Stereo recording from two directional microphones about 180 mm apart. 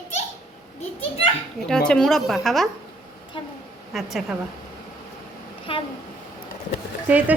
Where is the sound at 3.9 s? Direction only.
Centre (ahead or behind).